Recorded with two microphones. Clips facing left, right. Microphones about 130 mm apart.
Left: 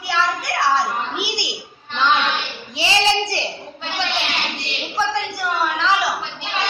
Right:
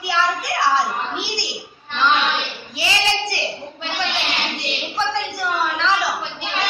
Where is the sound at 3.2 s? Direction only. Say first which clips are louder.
Even; 25° left (ahead or behind).